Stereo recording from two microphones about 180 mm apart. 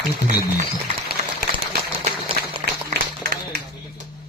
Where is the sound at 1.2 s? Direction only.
40° right (ahead or behind).